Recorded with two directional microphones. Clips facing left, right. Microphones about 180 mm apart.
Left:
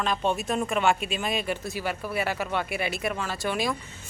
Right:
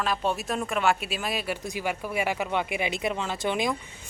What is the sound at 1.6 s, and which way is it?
Speech, 15° right (ahead or behind).